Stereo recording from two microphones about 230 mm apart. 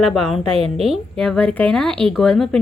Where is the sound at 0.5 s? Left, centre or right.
Right.